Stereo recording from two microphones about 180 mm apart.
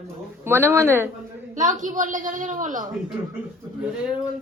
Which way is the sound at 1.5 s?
45° right (ahead or behind).